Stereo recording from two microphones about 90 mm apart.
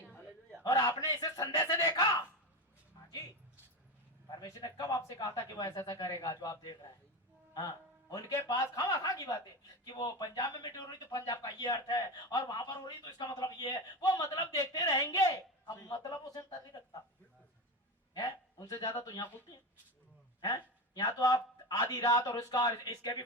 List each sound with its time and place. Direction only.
0.6 s speech: 40° left (ahead or behind)
4.4 s speech: 40° left (ahead or behind)
8.1 s a man's voice: 45° left (ahead or behind)
15.6 s speech: 50° left (ahead or behind)
16.1 s a man's voice: 40° left (ahead or behind)
18.1 s speech: 45° left (ahead or behind)